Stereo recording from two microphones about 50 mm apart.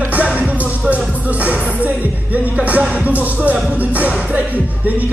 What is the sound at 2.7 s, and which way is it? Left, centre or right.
Music, right.